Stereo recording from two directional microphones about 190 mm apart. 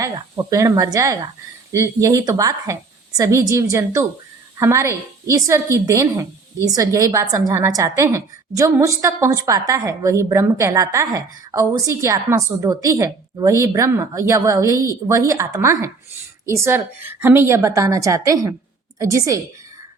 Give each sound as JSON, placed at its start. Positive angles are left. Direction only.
{"t": 0.0, "sound": "a woman's voice", "side_deg": -15}